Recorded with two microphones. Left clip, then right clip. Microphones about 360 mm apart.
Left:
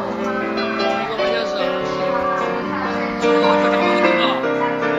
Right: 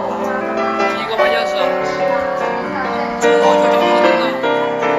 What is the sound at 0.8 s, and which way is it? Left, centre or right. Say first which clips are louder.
Music: right 4 dB; right.